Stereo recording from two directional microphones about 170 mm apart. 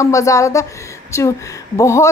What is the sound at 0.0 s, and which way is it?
A woman's voice, 20° left (ahead or behind).